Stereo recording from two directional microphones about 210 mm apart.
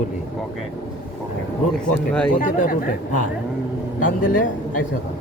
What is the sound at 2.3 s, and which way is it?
Speech, 40° left (ahead or behind).